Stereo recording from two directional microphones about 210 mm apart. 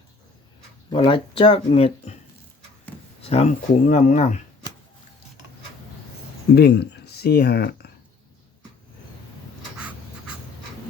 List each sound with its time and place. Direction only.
0.9 s speech: 25° left (ahead or behind)
3.2 s speech: 30° left (ahead or behind)
6.5 s speech: 50° left (ahead or behind)
9.7 s a sound: 5° right (ahead or behind)